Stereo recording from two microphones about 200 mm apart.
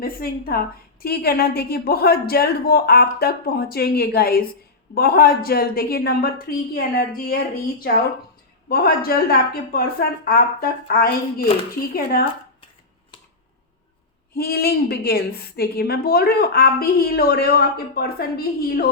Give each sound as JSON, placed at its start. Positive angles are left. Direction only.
{"t": 0.0, "sound": "a woman's voice", "side_deg": 50}
{"t": 12.1, "sound": "a woman's voice", "side_deg": 45}
{"t": 14.3, "sound": "a woman's voice", "side_deg": 50}